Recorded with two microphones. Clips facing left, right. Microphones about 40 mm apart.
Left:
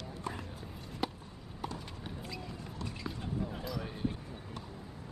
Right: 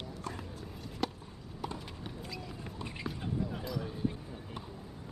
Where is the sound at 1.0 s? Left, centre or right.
Centre.